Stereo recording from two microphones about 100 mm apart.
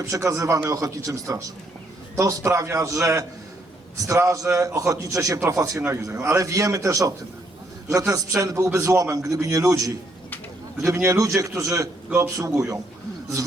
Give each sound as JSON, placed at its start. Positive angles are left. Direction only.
{"t": 0.0, "sound": "a man's voice", "side_deg": -30}